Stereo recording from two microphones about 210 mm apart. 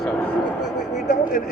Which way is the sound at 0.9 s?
35° left (ahead or behind).